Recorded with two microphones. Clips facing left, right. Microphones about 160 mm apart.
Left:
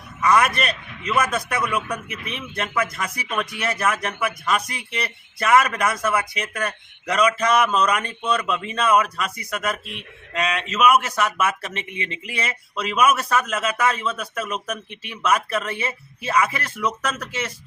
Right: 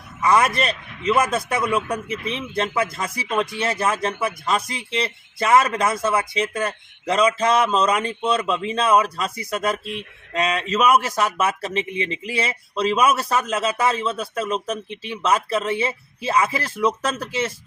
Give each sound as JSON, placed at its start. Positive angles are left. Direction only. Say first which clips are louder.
{"t": 0.2, "sound": "a man's voice", "louder": "right 1 dB", "side_deg": -25}